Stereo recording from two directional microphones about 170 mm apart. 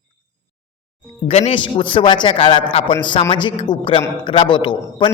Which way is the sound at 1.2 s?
35° left (ahead or behind).